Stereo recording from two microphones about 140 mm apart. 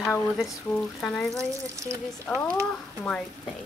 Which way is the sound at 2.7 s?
5° left (ahead or behind).